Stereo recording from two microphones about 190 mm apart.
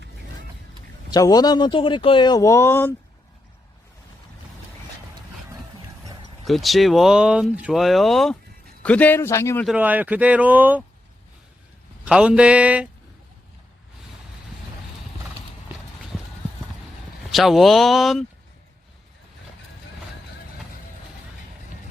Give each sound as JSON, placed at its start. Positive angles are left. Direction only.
{"t": 1.1, "sound": "speech", "side_deg": 20}
{"t": 6.4, "sound": "a man's voice", "side_deg": 0}
{"t": 9.6, "sound": "speech", "side_deg": -10}
{"t": 12.0, "sound": "speech", "side_deg": -5}
{"t": 16.1, "sound": "clip-clop", "side_deg": 0}
{"t": 17.3, "sound": "speech", "side_deg": 0}